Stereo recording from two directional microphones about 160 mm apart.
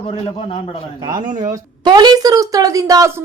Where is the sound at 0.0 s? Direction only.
35° left (ahead or behind).